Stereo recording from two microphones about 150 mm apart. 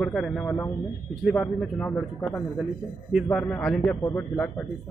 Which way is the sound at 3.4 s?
10° left (ahead or behind).